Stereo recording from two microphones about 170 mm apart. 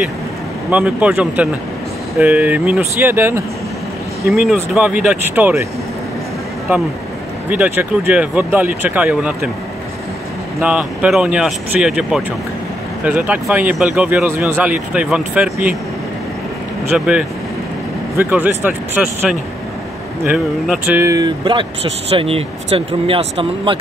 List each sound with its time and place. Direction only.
0.7 s speech: 10° right (ahead or behind)
7.4 s speech: 10° right (ahead or behind)
10.6 s speech: 5° right (ahead or behind)
16.9 s speech: 5° right (ahead or behind); by 23.8 s 30° right (ahead or behind)